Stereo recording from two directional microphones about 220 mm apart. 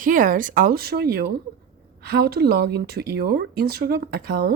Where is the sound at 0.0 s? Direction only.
35° right (ahead or behind).